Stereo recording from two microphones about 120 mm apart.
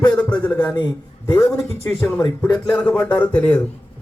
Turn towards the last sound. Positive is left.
turn(degrees=15)  # may be behind; listen again after turning